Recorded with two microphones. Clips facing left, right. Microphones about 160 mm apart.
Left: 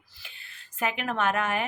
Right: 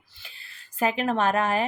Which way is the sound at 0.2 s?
35° right (ahead or behind).